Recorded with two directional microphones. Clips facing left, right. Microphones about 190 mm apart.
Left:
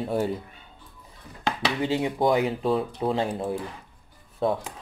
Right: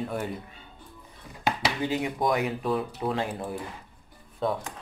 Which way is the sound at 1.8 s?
25° left (ahead or behind).